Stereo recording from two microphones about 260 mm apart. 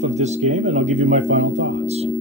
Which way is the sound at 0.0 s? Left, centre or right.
Right.